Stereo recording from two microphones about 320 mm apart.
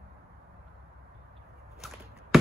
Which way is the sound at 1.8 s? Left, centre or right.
Centre.